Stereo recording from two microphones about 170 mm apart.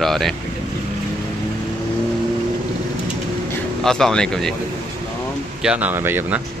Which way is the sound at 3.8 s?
5° left (ahead or behind).